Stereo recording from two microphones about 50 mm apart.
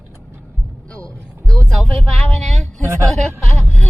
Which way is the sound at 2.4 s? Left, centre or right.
Centre.